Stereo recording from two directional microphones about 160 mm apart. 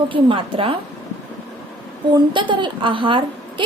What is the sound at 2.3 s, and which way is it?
Speech, 30° right (ahead or behind).